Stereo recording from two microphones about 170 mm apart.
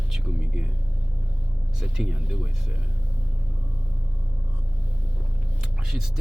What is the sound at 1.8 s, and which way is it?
Speech, centre (ahead or behind).